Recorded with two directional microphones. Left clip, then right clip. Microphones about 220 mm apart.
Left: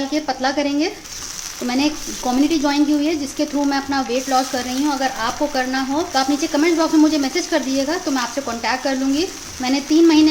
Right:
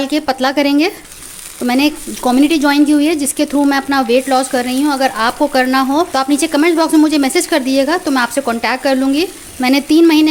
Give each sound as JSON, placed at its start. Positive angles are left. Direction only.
{"t": 0.0, "sound": "speech", "side_deg": -45}